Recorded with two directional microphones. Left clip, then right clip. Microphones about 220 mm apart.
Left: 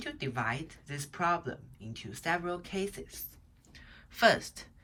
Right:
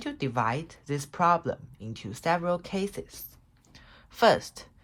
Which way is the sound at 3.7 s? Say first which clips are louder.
Right 1 dB; 15° right (ahead or behind).